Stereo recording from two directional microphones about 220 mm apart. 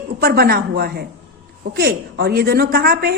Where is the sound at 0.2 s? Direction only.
45° right (ahead or behind).